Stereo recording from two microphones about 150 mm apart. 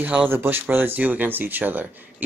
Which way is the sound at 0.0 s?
10° right (ahead or behind).